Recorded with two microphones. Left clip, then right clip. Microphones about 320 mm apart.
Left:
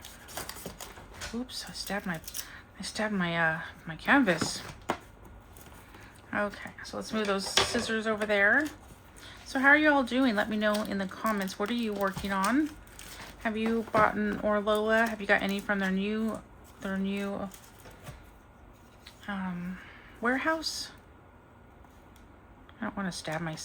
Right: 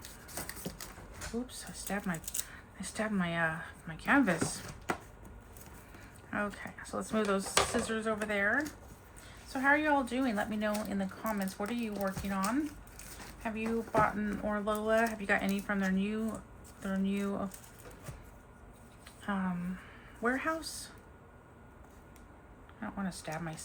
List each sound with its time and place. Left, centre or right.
1.6 s speech: centre
6.3 s speech: centre
19.0 s a sound: centre
20.2 s speech: centre
22.8 s speech: centre